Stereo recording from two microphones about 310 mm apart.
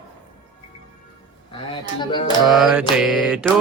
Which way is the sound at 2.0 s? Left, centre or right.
Centre.